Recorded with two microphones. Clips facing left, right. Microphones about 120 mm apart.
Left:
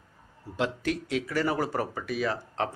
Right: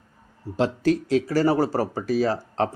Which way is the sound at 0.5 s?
35° right (ahead or behind).